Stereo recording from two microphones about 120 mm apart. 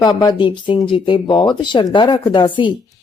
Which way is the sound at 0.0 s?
35° left (ahead or behind).